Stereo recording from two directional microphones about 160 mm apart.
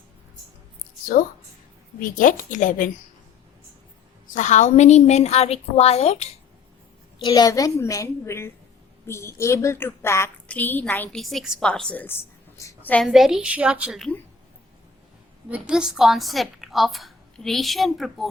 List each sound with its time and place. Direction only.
2.0 s a woman's voice: 55° left (ahead or behind)
4.4 s a woman's voice: 50° left (ahead or behind)
7.2 s a woman's voice: 25° left (ahead or behind)
11.2 s a woman's voice: centre (ahead or behind)
12.5 s a sound: 15° left (ahead or behind)
13.1 s a woman's voice: centre (ahead or behind)
15.4 s a woman's voice: 5° right (ahead or behind)